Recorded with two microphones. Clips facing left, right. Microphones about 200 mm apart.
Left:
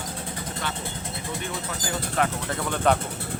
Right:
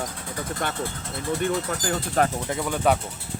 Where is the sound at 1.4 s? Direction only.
45° right (ahead or behind).